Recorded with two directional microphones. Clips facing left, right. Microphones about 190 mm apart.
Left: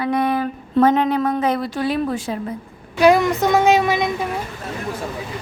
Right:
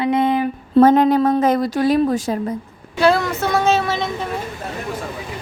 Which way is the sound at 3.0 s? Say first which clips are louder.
Left 3 dB; 15° left (ahead or behind).